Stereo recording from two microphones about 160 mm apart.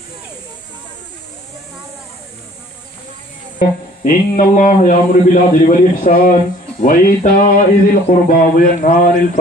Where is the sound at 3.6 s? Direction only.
60° left (ahead or behind).